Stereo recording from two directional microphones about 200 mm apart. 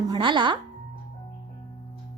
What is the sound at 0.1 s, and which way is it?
Speech, 25° right (ahead or behind).